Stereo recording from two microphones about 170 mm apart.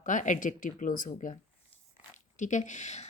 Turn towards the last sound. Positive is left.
turn(degrees=40)  # may be behind; listen again after turning